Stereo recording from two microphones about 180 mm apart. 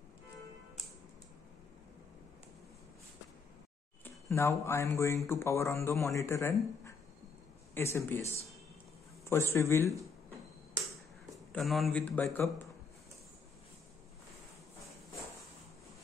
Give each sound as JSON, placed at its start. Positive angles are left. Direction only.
{"t": 4.0, "sound": "speech", "side_deg": 15}
{"t": 9.3, "sound": "speech", "side_deg": 15}
{"t": 11.5, "sound": "speech", "side_deg": 0}